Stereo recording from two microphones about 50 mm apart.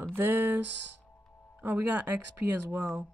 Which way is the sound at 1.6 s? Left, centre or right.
Right.